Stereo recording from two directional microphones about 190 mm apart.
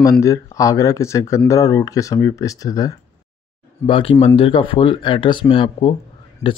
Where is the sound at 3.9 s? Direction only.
30° left (ahead or behind).